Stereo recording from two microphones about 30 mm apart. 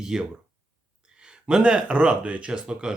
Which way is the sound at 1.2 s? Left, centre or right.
Right.